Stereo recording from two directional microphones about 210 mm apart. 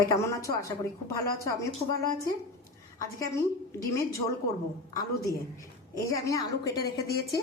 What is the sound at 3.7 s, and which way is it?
A woman's voice, 15° left (ahead or behind).